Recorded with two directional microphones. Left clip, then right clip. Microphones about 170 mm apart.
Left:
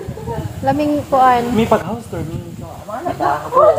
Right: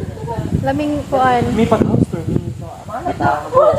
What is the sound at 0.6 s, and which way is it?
Speech, 10° left (ahead or behind).